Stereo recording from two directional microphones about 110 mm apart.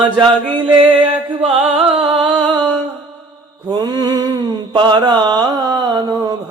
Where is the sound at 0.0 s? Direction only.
45° right (ahead or behind).